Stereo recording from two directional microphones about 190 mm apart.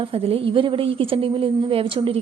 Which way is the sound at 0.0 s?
30° right (ahead or behind).